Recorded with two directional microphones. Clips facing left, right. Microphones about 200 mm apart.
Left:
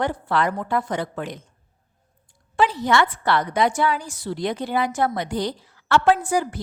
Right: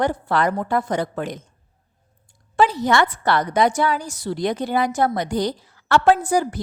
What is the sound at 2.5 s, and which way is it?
A woman's voice, 40° right (ahead or behind).